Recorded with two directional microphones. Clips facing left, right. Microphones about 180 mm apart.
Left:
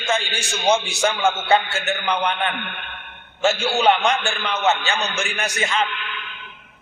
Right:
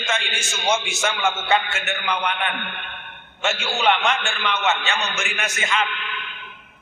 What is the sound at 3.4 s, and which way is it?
A man's voice, 35° left (ahead or behind).